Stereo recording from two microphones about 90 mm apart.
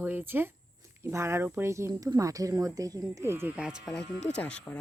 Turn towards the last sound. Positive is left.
turn(degrees=10)  # may be behind; listen again after turning